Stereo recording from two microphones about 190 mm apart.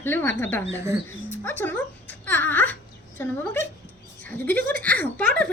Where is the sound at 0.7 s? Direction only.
15° right (ahead or behind).